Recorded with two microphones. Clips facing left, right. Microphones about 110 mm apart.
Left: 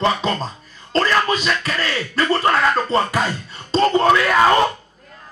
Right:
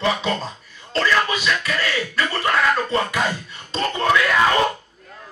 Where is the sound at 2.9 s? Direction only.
35° left (ahead or behind).